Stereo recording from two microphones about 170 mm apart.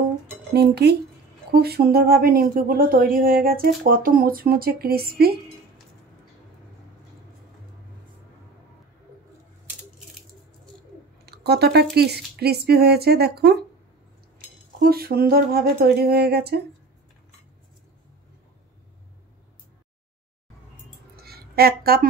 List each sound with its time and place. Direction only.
0.5 s speech: 75° right (ahead or behind)
11.2 s speech: 70° right (ahead or behind)
14.8 s speech: 60° right (ahead or behind)
21.2 s a sound: 65° right (ahead or behind)